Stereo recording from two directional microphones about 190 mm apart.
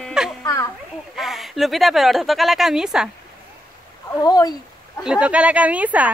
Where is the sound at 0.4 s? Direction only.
15° left (ahead or behind).